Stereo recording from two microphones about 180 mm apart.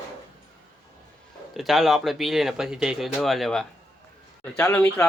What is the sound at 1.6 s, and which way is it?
Speech, centre (ahead or behind).